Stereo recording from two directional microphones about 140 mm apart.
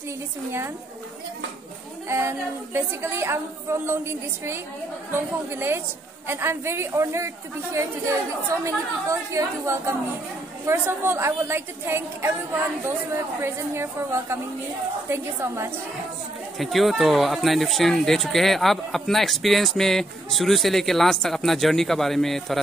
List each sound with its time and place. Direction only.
2.0 s a woman's voice: 20° right (ahead or behind)
13.4 s a woman's voice: 20° right (ahead or behind)
16.5 s speech: centre (ahead or behind)